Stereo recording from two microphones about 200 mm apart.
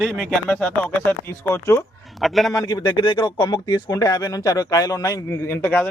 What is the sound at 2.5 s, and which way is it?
Speech, 20° left (ahead or behind).